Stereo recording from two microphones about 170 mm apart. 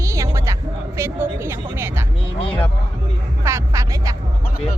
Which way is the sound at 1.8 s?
15° right (ahead or behind).